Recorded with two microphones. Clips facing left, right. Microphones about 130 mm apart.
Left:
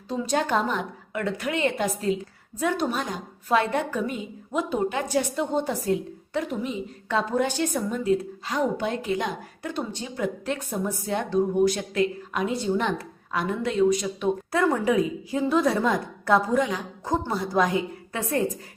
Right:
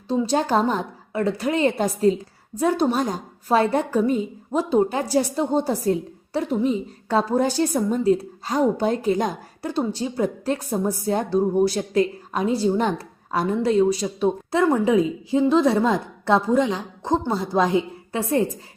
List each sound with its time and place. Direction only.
0.1 s a woman's voice: 30° right (ahead or behind)